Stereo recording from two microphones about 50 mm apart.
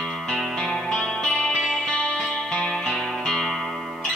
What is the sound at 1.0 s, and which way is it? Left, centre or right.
Music, centre.